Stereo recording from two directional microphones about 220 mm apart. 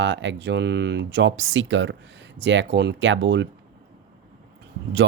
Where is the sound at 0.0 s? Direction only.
55° right (ahead or behind).